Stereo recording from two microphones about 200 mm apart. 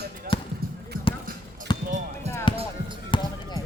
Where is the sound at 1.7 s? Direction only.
20° left (ahead or behind).